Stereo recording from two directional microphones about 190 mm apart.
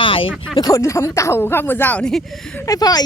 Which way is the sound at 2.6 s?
20° left (ahead or behind).